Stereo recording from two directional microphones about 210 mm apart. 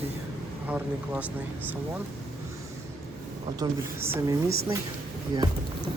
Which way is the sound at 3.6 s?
15° right (ahead or behind).